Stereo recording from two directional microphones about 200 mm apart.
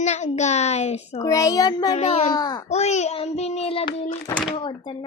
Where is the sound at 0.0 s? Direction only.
35° left (ahead or behind).